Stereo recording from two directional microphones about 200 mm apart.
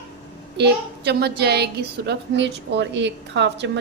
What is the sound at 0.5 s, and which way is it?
A woman's voice, 55° right (ahead or behind).